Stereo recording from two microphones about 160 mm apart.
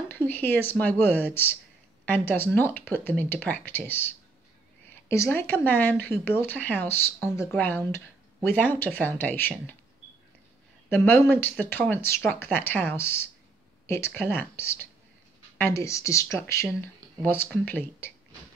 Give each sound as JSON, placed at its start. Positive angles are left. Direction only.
{"t": 0.1, "sound": "speech", "side_deg": 10}
{"t": 10.9, "sound": "speech", "side_deg": 15}